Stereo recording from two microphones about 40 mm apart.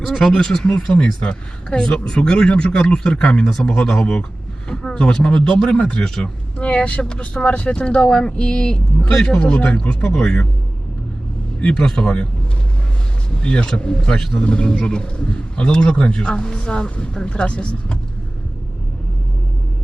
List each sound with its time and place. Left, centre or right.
0.0 s speech: centre
6.1 s speech: centre
6.6 s speech: left
11.7 s speech: centre
13.3 s speech: left